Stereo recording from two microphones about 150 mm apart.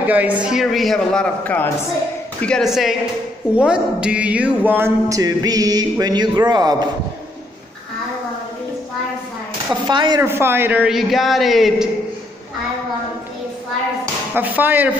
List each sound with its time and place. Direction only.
0.0 s a man's voice: 10° right (ahead or behind); by 6.9 s 25° right (ahead or behind)
9.8 s chopping: 30° right (ahead or behind)
10.2 s a man's voice: 15° right (ahead or behind)
14.3 s speech: 10° right (ahead or behind)